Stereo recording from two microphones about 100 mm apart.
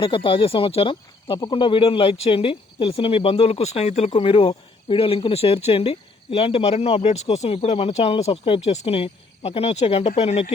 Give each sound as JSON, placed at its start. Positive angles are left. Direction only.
{"t": 0.0, "sound": "speech", "side_deg": 60}